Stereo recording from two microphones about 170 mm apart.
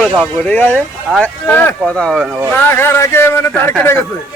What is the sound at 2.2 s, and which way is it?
Speech, 10° right (ahead or behind).